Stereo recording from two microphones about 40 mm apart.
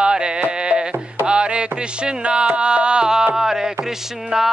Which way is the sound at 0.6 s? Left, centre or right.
Right.